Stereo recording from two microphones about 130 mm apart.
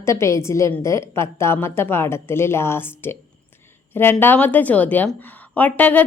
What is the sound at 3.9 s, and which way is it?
A woman's voice, 15° left (ahead or behind).